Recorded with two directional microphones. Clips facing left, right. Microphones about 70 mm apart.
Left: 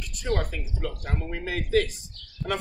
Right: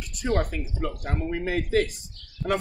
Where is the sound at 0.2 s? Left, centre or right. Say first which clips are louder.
Right 3 dB; right.